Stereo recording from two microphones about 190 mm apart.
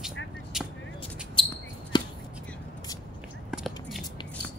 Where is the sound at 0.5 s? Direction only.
Centre (ahead or behind).